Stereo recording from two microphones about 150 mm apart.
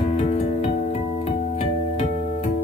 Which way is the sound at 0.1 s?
45° left (ahead or behind).